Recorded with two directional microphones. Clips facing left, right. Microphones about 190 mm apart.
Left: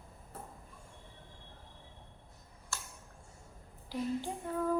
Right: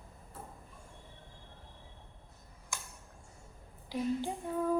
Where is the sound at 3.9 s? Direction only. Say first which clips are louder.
Right 2 dB; 15° right (ahead or behind).